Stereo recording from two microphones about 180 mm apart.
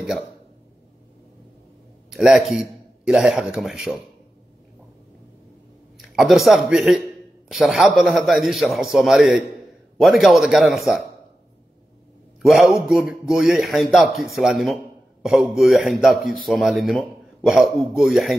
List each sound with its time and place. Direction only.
2.0 s a man's voice: 5° right (ahead or behind)
5.9 s a man's voice: centre (ahead or behind)
12.4 s a man's voice: centre (ahead or behind)